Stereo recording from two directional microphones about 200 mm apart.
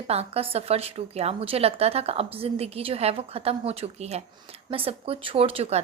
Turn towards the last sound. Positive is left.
turn(degrees=-30)  # may be behind; listen again after turning